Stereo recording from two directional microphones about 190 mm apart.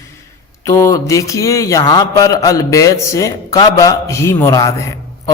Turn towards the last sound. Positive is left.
turn(degrees=15)  # may be behind; listen again after turning